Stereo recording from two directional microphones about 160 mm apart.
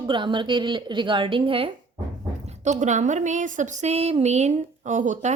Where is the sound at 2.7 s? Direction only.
50° right (ahead or behind).